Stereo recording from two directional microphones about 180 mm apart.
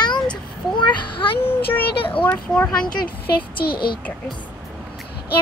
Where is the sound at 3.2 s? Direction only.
60° left (ahead or behind).